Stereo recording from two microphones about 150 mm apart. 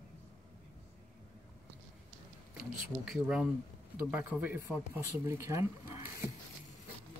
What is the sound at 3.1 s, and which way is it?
Speech, 5° right (ahead or behind).